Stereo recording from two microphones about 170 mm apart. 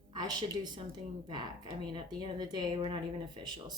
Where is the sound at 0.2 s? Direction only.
25° right (ahead or behind).